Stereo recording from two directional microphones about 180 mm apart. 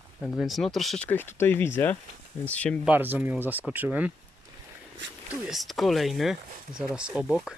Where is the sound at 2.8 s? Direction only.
10° right (ahead or behind).